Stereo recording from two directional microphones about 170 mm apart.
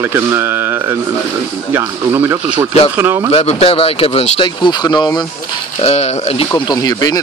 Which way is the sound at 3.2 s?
35° left (ahead or behind).